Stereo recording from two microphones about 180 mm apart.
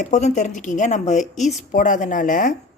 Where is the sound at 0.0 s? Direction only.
40° left (ahead or behind).